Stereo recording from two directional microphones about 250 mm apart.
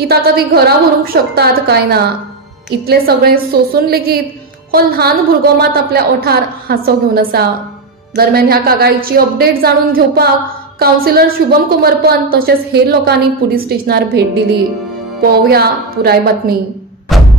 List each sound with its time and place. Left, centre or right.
0.1 s a woman's voice: right
4.6 s music: right
5.6 s a woman's voice: right
17.1 s music: centre